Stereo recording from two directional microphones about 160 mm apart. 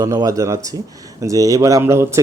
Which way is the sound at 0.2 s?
20° right (ahead or behind).